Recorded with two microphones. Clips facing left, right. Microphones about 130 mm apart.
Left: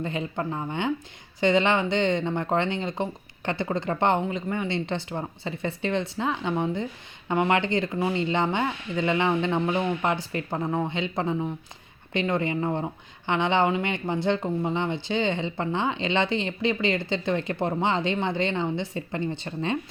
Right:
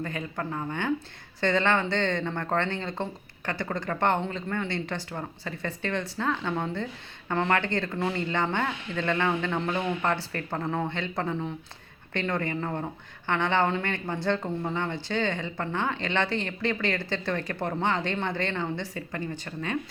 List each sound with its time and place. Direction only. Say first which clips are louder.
0.0 s speech: left 4 dB; 20° left (ahead or behind)